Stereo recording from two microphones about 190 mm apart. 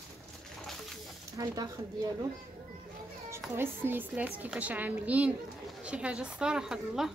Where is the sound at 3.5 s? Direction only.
10° right (ahead or behind).